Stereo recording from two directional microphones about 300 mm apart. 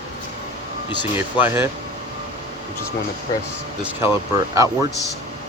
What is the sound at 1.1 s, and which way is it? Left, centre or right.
Speech, centre.